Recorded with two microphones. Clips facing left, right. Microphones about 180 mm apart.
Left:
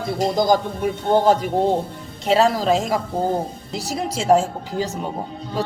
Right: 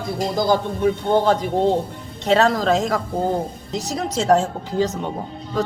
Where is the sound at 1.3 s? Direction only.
10° left (ahead or behind).